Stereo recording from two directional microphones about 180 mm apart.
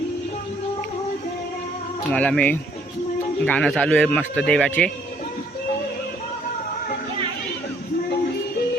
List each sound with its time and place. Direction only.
2.1 s speech: 10° left (ahead or behind)